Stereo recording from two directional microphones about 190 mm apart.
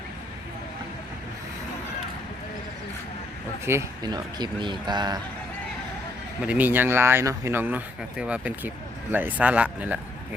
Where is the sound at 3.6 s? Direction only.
15° right (ahead or behind).